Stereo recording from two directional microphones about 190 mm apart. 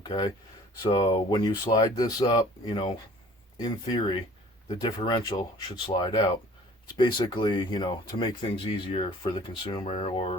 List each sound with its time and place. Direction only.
0.0 s speech: 25° left (ahead or behind)
2.6 s speech: 30° left (ahead or behind)